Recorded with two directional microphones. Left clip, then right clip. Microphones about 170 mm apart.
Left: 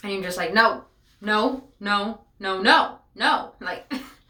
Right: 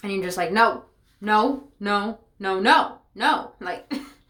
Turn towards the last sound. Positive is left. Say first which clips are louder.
# even
turn(degrees=-45)  # may be behind; listen again after turning